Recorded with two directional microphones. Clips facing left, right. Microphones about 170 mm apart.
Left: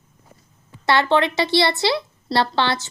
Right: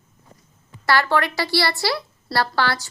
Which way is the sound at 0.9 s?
20° left (ahead or behind).